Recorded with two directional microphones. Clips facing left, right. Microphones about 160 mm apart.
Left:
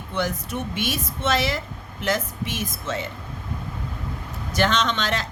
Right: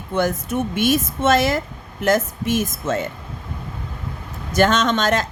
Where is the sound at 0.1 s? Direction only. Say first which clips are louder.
Right 6 dB; 50° right (ahead or behind).